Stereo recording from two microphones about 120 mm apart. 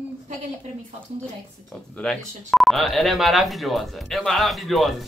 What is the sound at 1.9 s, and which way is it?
Speech, 10° left (ahead or behind).